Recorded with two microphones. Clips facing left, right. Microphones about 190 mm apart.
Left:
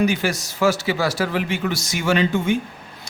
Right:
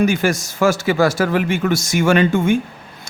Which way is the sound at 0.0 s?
50° right (ahead or behind).